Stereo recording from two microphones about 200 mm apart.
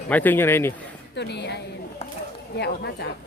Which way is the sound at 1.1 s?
60° left (ahead or behind).